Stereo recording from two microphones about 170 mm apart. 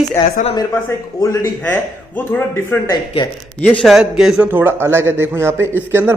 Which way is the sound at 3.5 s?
Centre (ahead or behind).